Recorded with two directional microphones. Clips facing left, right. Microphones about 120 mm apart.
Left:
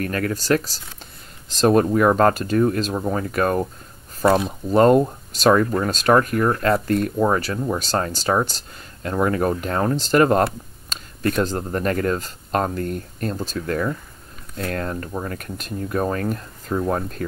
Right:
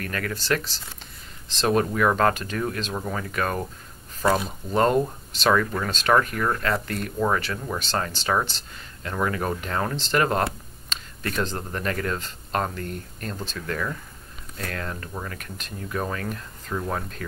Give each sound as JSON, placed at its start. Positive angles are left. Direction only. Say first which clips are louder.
{"t": 0.0, "sound": "speech", "louder": "left 6 dB", "side_deg": 40}